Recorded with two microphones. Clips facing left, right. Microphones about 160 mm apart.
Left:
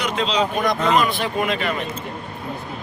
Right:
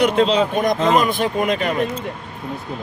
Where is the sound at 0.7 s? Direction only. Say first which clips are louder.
Right 2 dB; 20° right (ahead or behind).